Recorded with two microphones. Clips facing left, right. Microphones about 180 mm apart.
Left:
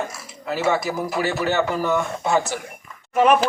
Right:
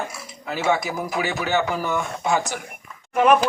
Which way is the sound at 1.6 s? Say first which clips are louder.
Left 2 dB; 10° right (ahead or behind).